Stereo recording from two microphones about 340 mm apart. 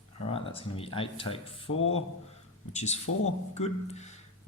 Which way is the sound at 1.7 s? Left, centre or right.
Left.